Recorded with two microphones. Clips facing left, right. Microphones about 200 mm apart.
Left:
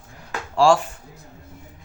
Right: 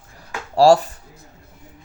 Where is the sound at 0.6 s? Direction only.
40° right (ahead or behind).